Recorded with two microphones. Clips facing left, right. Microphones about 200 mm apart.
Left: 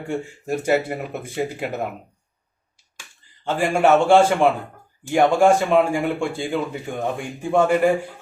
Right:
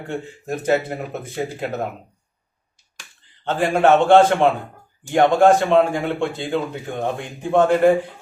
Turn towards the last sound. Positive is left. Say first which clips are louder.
# right 2 dB
turn(degrees=10)  # may be behind; listen again after turning